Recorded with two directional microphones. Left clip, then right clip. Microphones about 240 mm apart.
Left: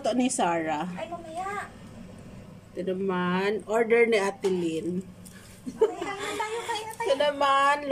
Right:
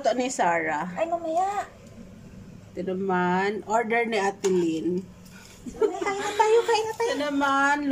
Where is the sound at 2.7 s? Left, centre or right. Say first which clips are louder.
Right 3 dB; centre.